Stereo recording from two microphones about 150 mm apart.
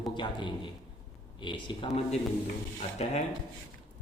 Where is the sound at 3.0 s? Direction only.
45° left (ahead or behind).